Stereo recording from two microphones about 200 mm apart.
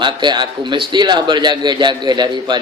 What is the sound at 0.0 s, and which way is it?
Speech, 20° right (ahead or behind).